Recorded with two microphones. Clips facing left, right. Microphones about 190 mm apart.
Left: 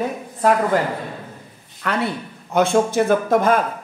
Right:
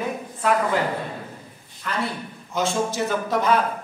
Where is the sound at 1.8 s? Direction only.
65° left (ahead or behind); by 3.6 s 50° left (ahead or behind).